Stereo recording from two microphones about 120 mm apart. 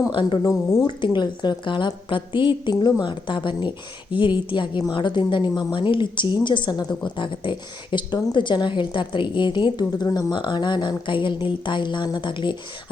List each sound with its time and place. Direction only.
0.1 s a woman's voice: 45° left (ahead or behind)